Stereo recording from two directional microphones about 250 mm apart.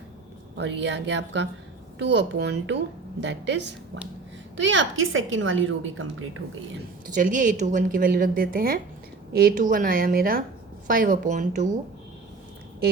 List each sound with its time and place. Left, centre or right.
0.5 s a woman's voice: right
7.1 s a woman's voice: right